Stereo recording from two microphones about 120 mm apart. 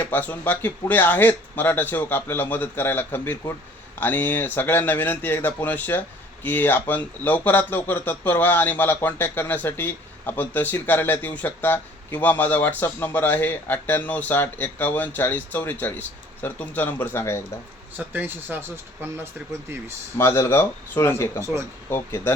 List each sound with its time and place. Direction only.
0.0 s speech: 15° left (ahead or behind)
17.9 s speech: 15° right (ahead or behind)
20.1 s speech: 20° left (ahead or behind)